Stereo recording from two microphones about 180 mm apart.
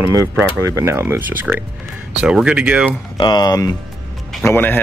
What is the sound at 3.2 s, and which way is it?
Speech, 25° left (ahead or behind).